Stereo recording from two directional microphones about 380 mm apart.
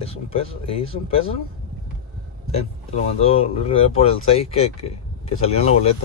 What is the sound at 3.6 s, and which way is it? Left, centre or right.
Speech, centre.